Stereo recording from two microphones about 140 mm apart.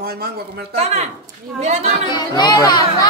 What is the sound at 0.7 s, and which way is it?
A woman's voice, 50° right (ahead or behind).